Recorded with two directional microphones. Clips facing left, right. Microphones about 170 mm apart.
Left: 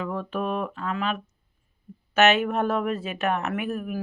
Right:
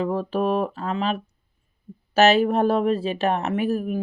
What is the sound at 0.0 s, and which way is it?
Speech, 35° right (ahead or behind).